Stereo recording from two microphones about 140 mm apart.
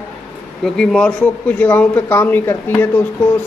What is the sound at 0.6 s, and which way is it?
A man's voice, 5° left (ahead or behind).